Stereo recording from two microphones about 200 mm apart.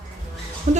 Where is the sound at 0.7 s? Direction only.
35° right (ahead or behind).